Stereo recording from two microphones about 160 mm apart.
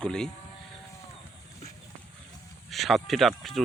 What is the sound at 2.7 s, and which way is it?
Speech, centre (ahead or behind).